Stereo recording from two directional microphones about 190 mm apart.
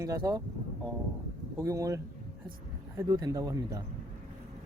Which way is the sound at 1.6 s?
15° right (ahead or behind).